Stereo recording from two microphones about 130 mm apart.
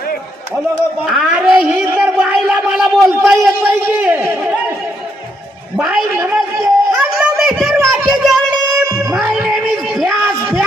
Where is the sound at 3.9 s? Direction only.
15° right (ahead or behind).